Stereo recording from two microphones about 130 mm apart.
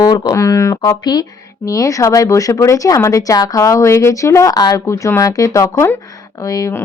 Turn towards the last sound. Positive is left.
turn(degrees=25)  # may be behind; listen again after turning